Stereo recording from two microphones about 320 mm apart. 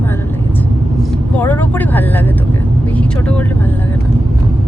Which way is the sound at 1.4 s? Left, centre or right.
Centre.